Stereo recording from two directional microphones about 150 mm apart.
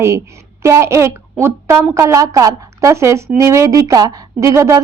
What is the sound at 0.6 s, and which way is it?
A woman's voice, 20° right (ahead or behind).